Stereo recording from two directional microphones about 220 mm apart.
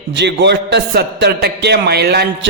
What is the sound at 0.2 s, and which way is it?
Speech, 50° right (ahead or behind).